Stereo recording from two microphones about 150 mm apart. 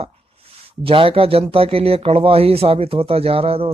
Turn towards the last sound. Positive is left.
turn(degrees=-40)  # may be behind; listen again after turning